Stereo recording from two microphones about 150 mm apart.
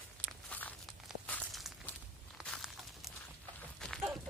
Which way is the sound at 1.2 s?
10° left (ahead or behind).